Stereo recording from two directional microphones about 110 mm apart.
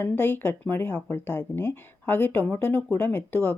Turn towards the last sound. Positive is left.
turn(degrees=15)  # may be behind; listen again after turning